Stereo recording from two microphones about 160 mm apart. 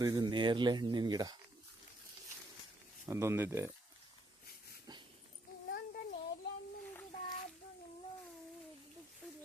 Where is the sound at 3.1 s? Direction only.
15° right (ahead or behind).